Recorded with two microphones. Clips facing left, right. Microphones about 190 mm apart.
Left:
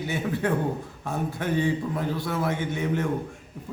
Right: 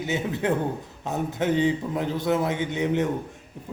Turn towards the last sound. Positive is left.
turn(degrees=-20)  # may be behind; listen again after turning